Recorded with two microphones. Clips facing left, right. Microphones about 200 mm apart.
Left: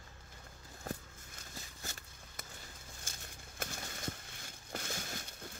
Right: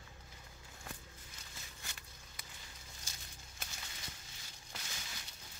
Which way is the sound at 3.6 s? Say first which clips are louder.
Left 9 dB; 55° left (ahead or behind).